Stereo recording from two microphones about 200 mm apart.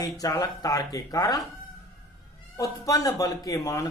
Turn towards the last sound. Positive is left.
turn(degrees=20)  # may be behind; listen again after turning